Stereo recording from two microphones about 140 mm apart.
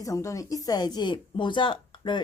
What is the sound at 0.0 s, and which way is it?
Speech, 25° left (ahead or behind).